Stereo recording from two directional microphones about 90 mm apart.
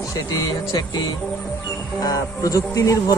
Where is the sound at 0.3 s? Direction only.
40° left (ahead or behind).